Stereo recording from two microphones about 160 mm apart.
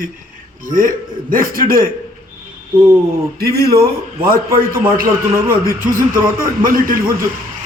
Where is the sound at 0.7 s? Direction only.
55° right (ahead or behind).